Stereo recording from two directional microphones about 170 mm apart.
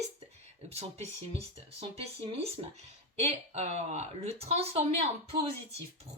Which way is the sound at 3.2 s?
40° right (ahead or behind).